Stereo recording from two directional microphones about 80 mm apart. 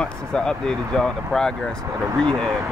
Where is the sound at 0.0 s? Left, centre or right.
Centre.